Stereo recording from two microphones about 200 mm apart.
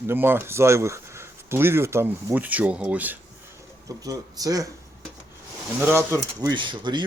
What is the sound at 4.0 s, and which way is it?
Speech, 20° right (ahead or behind).